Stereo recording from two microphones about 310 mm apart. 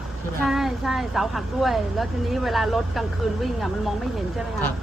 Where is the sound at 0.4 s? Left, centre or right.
Centre.